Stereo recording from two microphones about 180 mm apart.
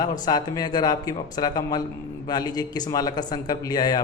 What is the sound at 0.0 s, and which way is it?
A man's voice, 25° left (ahead or behind).